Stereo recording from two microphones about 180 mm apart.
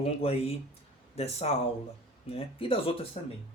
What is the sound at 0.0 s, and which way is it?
Speech, 35° left (ahead or behind).